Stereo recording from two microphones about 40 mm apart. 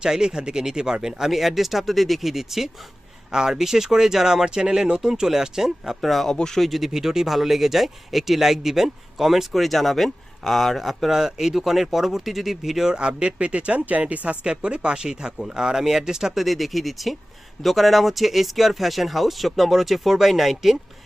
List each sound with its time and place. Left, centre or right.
0.0 s speech: centre
1.3 s speech: centre
6.0 s speech: centre
6.3 s speech: centre
6.6 s speech: centre
12.9 s speech: right
14.4 s speech: right; by 20.7 s centre